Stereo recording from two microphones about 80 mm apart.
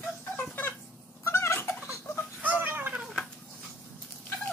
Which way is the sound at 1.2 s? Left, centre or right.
Left.